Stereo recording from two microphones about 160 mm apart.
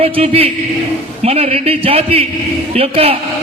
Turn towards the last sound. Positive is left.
turn(degrees=-40)  # may be behind; listen again after turning